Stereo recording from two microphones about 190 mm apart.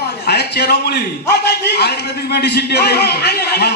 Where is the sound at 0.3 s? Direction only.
60° left (ahead or behind).